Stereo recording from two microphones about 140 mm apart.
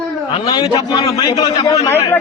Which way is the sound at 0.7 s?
25° left (ahead or behind).